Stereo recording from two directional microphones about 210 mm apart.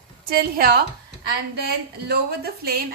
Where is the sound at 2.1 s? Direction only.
45° right (ahead or behind).